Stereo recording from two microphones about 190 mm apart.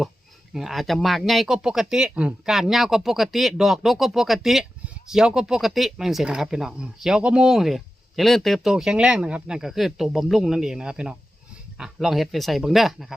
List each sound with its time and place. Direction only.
0.5 s speech: centre (ahead or behind)